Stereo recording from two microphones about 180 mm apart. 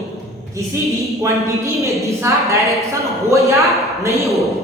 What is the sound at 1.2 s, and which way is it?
A woman's voice, 15° right (ahead or behind).